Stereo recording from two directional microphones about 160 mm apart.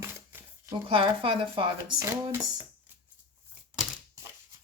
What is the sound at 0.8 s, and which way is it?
Speech, 30° right (ahead or behind).